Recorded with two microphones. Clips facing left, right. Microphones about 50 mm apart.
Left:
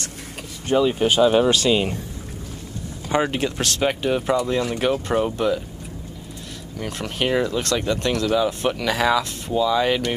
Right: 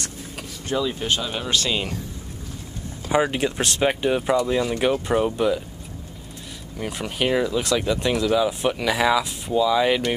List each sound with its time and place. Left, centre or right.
0.7 s speech: left
1.0 s speech: centre
3.1 s speech: centre
3.3 s speech: centre
6.8 s speech: centre
7.2 s speech: centre